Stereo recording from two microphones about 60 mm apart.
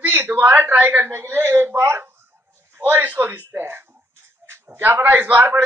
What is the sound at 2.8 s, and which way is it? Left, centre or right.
A man's voice, right.